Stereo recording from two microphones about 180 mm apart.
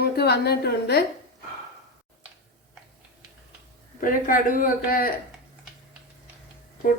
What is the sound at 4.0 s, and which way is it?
A woman's voice, 50° left (ahead or behind).